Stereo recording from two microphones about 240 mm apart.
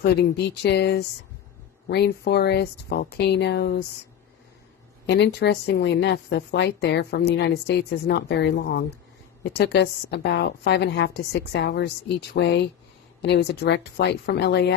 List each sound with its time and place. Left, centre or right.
0.0 s a woman's voice: left
5.0 s a woman's voice: left